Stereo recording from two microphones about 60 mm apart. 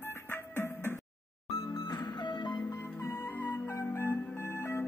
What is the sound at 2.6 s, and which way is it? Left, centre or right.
Music, left.